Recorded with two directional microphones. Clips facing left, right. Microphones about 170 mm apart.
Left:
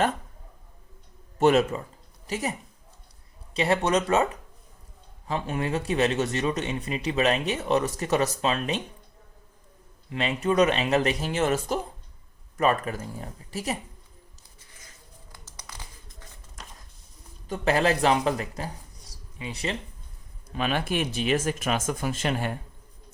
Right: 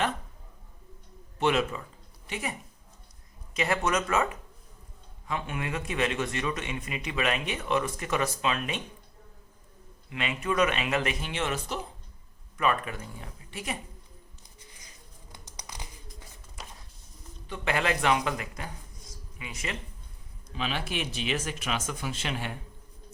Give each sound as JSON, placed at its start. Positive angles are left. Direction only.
{"t": 1.4, "sound": "a woman's voice", "side_deg": 45}
{"t": 3.5, "sound": "a man's voice", "side_deg": 30}
{"t": 10.1, "sound": "a man's voice", "side_deg": 35}
{"t": 14.8, "sound": "bird", "side_deg": -15}
{"t": 17.5, "sound": "a man's voice", "side_deg": 35}
{"t": 19.1, "sound": "a sound", "side_deg": 35}
{"t": 20.5, "sound": "speech", "side_deg": 50}